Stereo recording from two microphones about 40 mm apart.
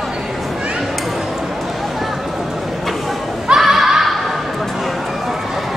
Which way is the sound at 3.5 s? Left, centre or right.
Centre.